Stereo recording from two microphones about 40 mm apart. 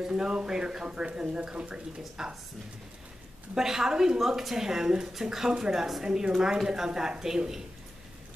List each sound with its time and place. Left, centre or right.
0.1 s speech: right
2.2 s speech: centre
3.5 s speech: centre